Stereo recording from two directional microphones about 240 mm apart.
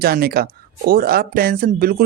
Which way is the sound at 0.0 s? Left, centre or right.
Right.